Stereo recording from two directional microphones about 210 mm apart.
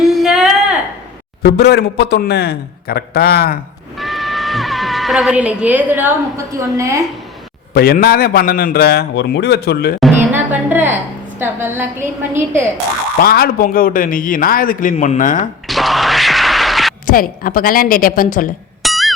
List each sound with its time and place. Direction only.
0.0 s a sound: centre (ahead or behind)
1.4 s a man's voice: 50° left (ahead or behind)
3.9 s speech: centre (ahead or behind)
7.7 s a man's voice: 50° left (ahead or behind)
10.3 s music: 10° right (ahead or behind)
11.3 s a woman's voice: 10° right (ahead or behind)
13.2 s a man's voice: 45° left (ahead or behind)
15.6 s a sound: centre (ahead or behind)
17.1 s a man's voice: 45° left (ahead or behind)
18.8 s music: centre (ahead or behind)